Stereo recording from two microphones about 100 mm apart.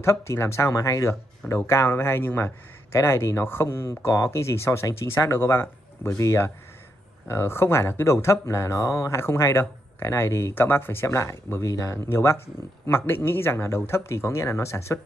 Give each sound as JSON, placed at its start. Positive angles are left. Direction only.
{"t": 0.0, "sound": "speech", "side_deg": 30}